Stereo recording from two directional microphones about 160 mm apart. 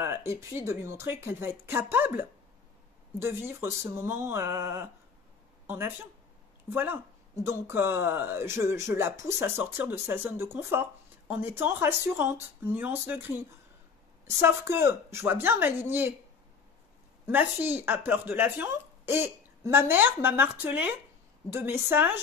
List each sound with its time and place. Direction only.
0.0 s speech: 15° right (ahead or behind)
17.3 s speech: 10° right (ahead or behind)